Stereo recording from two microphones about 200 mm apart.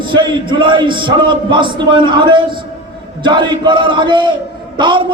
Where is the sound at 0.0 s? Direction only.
25° right (ahead or behind).